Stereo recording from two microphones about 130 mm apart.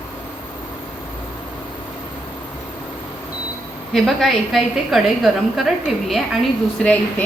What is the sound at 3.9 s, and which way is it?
A woman's voice, centre (ahead or behind).